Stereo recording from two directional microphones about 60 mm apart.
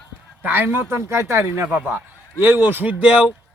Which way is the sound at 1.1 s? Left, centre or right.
Right.